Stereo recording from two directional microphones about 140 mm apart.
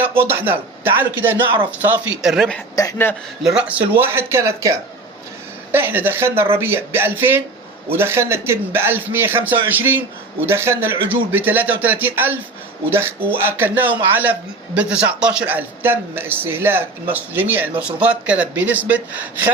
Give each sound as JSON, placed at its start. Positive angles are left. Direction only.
{"t": 0.0, "sound": "speech", "side_deg": -15}
{"t": 1.9, "sound": "speech", "side_deg": -5}
{"t": 2.7, "sound": "speech", "side_deg": 25}
{"t": 3.4, "sound": "a man's voice", "side_deg": -5}